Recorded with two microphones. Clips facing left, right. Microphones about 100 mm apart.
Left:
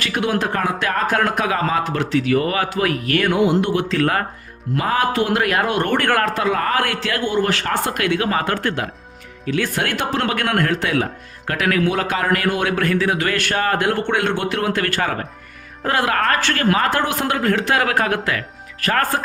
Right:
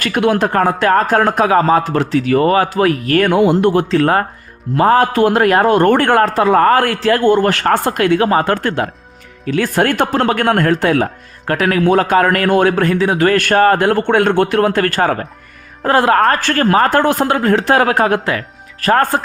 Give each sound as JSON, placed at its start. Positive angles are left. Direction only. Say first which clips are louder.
{"t": 0.0, "sound": "a man's voice", "louder": "right 6 dB", "side_deg": -55}
{"t": 3.8, "sound": "a man's voice", "louder": "right 6 dB", "side_deg": -30}
{"t": 4.8, "sound": "speech", "louder": "right 8 dB", "side_deg": -45}
{"t": 6.1, "sound": "a man's voice", "louder": "right 7 dB", "side_deg": -30}
{"t": 13.1, "sound": "a man's voice", "louder": "right 9 dB", "side_deg": -45}
{"t": 17.2, "sound": "a man's voice", "louder": "right 6 dB", "side_deg": -35}